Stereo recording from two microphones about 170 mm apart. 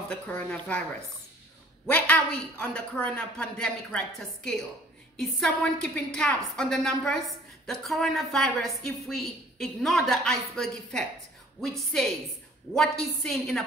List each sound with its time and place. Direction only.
0.1 s speech: 5° left (ahead or behind)
1.9 s a woman's voice: 10° left (ahead or behind)
13.2 s a woman's voice: 5° left (ahead or behind)